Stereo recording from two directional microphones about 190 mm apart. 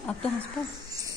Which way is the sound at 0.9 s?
20° right (ahead or behind).